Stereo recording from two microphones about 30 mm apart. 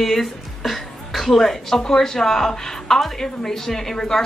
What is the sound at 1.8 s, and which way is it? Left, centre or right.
Speech, left.